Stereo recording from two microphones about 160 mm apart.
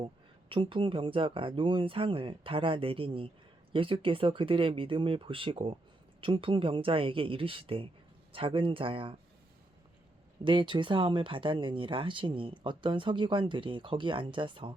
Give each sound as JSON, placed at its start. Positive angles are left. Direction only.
{"t": 0.4, "sound": "speech", "side_deg": -30}
{"t": 10.4, "sound": "speech", "side_deg": -30}